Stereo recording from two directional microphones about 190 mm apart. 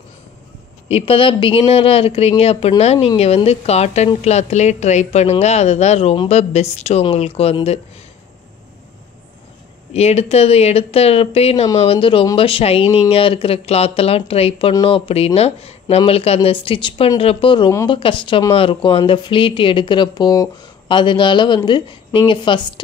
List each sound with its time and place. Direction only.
0.8 s a woman's voice: 30° left (ahead or behind)
9.9 s a woman's voice: 35° left (ahead or behind)